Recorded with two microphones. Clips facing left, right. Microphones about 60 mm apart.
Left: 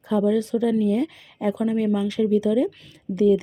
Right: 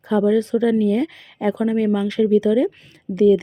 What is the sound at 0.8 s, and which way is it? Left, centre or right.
Speech, right.